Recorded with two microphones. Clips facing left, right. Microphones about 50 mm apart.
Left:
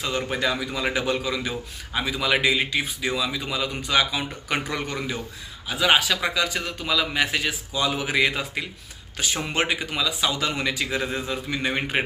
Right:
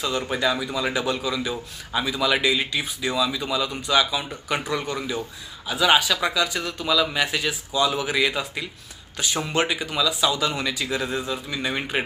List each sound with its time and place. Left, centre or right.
0.0 s a man's voice: left
5.6 s a man's voice: left